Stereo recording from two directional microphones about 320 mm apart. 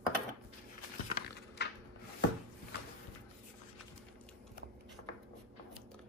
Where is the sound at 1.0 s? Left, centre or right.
Left.